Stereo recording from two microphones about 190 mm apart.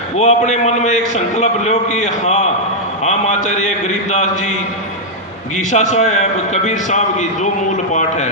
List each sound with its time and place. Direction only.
0.2 s a man's voice: 35° left (ahead or behind)
5.5 s a man's voice: 40° left (ahead or behind)